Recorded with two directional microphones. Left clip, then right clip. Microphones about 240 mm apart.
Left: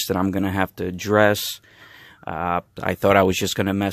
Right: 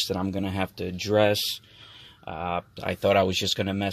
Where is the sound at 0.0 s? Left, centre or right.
Left.